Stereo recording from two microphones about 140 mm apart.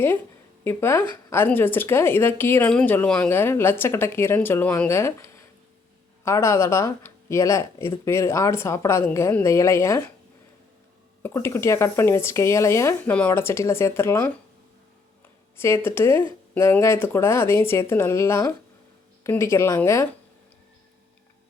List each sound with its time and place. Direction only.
0.6 s speech: 15° left (ahead or behind)
11.2 s speech: 20° left (ahead or behind)
15.5 s speech: 15° left (ahead or behind)